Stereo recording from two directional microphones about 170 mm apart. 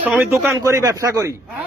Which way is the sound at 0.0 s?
10° right (ahead or behind).